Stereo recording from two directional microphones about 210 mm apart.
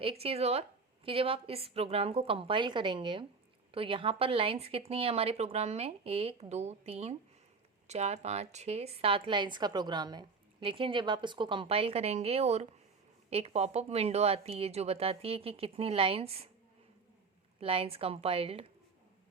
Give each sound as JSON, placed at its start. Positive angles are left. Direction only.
{"t": 0.0, "sound": "a woman's voice", "side_deg": -25}
{"t": 17.6, "sound": "a woman's voice", "side_deg": -25}